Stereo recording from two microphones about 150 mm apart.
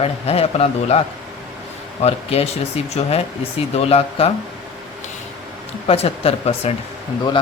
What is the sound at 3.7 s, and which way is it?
Speech, 40° left (ahead or behind).